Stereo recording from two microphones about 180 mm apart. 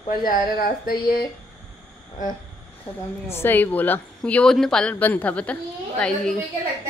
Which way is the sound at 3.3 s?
10° left (ahead or behind).